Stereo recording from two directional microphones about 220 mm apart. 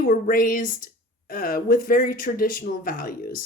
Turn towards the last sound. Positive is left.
turn(degrees=40)  # may be behind; listen again after turning